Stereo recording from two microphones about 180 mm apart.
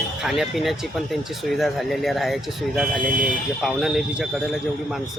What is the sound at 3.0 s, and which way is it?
Speech, 50° right (ahead or behind).